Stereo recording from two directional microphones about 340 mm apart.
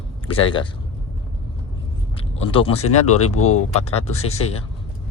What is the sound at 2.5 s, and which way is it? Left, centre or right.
Speech, centre.